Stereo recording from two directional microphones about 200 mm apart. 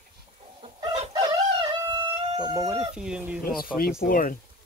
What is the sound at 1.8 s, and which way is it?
Chicken, 20° right (ahead or behind).